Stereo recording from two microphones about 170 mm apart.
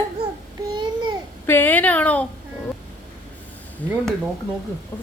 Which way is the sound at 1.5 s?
10° left (ahead or behind).